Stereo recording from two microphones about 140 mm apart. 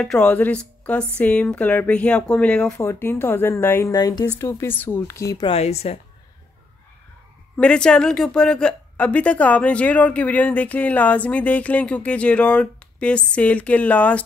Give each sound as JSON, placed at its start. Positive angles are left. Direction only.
{"t": 0.0, "sound": "a woman's voice", "side_deg": 5}
{"t": 2.8, "sound": "a woman's voice", "side_deg": 20}
{"t": 3.9, "sound": "speech", "side_deg": 30}
{"t": 5.5, "sound": "speech", "side_deg": 50}
{"t": 7.5, "sound": "a woman's voice", "side_deg": 5}